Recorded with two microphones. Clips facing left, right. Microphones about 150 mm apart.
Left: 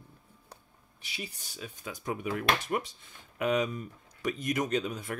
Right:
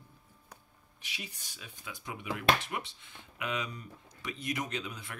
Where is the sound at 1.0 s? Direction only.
35° left (ahead or behind).